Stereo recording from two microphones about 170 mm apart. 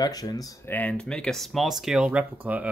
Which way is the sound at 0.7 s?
5° left (ahead or behind).